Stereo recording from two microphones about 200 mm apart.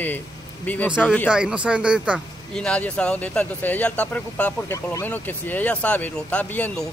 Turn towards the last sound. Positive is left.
turn(degrees=5)  # may be behind; listen again after turning